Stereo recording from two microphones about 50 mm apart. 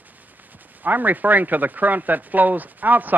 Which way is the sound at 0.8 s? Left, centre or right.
Right.